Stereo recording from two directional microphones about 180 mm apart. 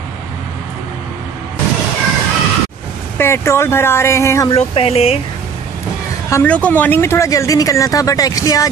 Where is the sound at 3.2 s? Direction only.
15° left (ahead or behind).